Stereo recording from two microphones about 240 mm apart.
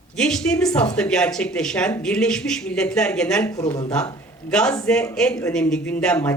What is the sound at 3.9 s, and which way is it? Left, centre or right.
Speech, centre.